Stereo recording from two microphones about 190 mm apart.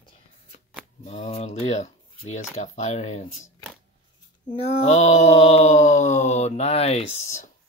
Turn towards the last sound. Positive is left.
turn(degrees=40)  # may be behind; listen again after turning